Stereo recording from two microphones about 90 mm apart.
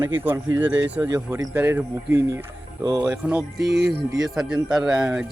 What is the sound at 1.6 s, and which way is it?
Speech, 20° right (ahead or behind).